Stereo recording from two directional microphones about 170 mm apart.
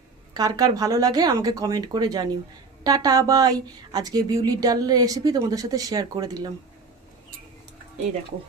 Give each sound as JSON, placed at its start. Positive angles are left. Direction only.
{"t": 0.3, "sound": "speech", "side_deg": -20}